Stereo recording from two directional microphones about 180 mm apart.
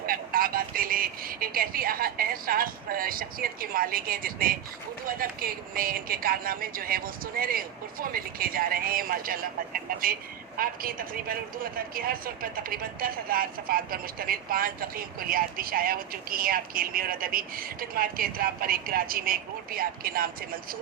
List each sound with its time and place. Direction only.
0.0 s speech: 55° right (ahead or behind)